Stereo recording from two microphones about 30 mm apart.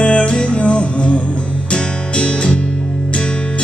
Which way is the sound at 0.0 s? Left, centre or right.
Left.